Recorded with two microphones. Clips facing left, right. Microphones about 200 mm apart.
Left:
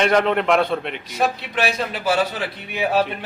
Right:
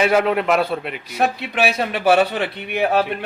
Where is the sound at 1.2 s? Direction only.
60° right (ahead or behind).